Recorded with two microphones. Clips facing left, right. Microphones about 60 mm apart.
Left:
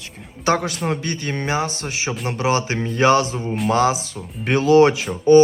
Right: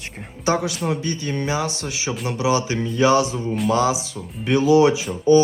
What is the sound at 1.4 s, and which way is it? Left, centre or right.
Music, left.